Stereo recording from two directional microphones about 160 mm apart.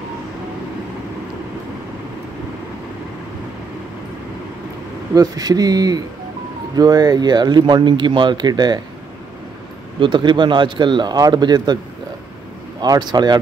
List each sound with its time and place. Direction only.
5.1 s speech: 20° right (ahead or behind)
9.9 s speech: 30° right (ahead or behind)
12.8 s speech: 25° right (ahead or behind)